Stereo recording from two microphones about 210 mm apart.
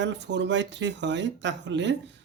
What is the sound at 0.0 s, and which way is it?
Speech, 55° right (ahead or behind).